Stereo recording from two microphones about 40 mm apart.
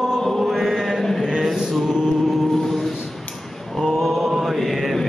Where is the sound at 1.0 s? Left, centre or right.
Centre.